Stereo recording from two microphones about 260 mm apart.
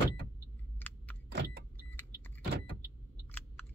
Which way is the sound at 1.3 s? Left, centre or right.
Right.